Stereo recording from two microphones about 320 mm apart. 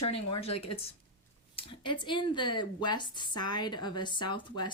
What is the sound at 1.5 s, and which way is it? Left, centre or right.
Speech, centre.